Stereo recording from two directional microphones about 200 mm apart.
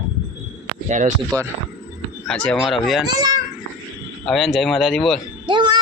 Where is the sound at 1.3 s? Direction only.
20° right (ahead or behind).